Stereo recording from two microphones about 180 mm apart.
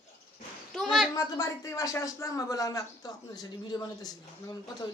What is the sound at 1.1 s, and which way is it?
A man's voice, 15° left (ahead or behind).